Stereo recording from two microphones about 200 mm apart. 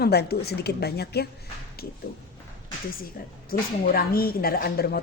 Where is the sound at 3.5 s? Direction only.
45° left (ahead or behind).